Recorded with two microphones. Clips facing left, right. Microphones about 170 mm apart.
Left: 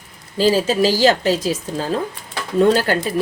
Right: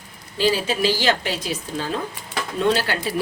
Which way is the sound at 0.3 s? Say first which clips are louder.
Left 5 dB; 40° left (ahead or behind).